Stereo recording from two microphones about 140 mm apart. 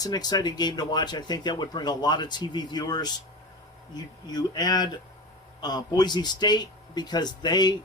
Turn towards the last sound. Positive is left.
turn(degrees=30)  # may be behind; listen again after turning